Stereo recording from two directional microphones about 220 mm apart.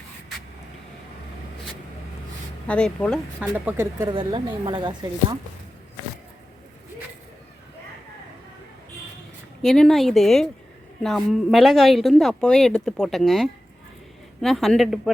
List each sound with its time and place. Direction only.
2.6 s speech: 5° left (ahead or behind)
3.4 s speech: 10° right (ahead or behind)
4.1 s speech: 20° right (ahead or behind)
9.6 s speech: 5° left (ahead or behind)